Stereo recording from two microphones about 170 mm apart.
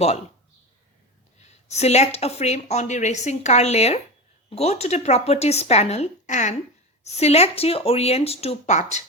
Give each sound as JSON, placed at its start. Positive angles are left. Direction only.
{"t": 1.4, "sound": "speech", "side_deg": 40}